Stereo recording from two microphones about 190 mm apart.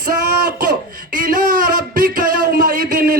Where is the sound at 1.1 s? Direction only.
45° right (ahead or behind).